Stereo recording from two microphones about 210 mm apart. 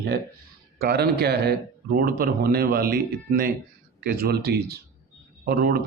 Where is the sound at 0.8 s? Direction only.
50° right (ahead or behind).